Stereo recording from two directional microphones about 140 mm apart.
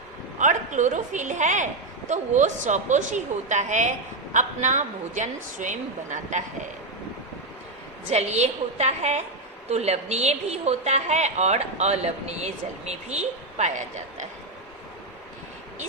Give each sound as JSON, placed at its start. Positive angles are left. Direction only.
{"t": 0.3, "sound": "a woman's voice", "side_deg": -60}
{"t": 8.1, "sound": "a woman's voice", "side_deg": -50}